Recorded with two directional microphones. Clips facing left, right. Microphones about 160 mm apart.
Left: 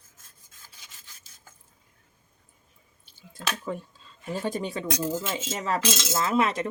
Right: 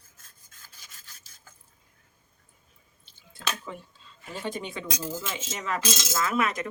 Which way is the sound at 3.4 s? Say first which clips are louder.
Left 3 dB; 45° left (ahead or behind).